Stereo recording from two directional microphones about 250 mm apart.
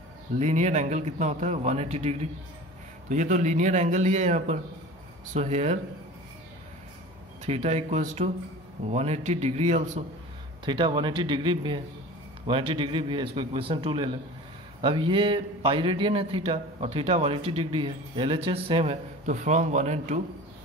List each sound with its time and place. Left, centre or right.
0.4 s a man's voice: right
7.4 s a man's voice: right